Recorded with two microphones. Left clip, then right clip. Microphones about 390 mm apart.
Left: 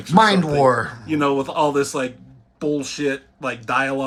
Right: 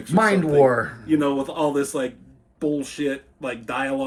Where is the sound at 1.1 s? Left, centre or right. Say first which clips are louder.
Left 2 dB; left.